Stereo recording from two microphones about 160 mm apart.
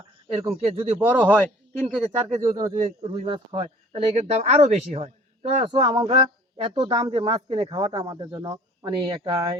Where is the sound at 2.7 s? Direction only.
35° right (ahead or behind).